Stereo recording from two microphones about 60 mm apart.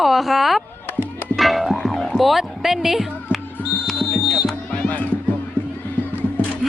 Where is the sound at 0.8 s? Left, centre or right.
Left.